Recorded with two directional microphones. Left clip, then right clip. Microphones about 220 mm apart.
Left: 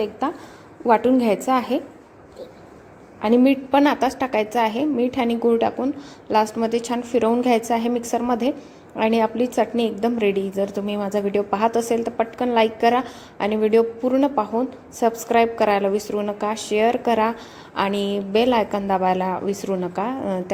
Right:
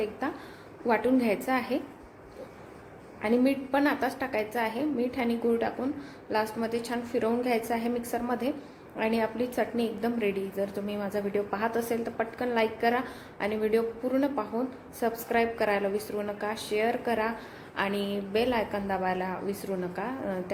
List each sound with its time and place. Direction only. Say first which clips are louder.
0.9 s a woman's voice: left 9 dB; 25° left (ahead or behind)
3.2 s a woman's voice: left 9 dB; 30° left (ahead or behind)